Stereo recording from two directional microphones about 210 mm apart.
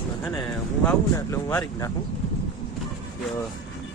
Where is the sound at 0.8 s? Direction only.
10° left (ahead or behind).